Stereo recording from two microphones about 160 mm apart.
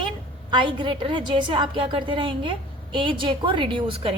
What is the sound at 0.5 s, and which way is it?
A woman's voice, 30° right (ahead or behind).